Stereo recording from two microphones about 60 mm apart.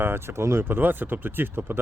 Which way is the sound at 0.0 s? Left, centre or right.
Right.